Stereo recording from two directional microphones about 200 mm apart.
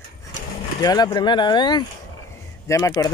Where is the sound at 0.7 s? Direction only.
20° left (ahead or behind).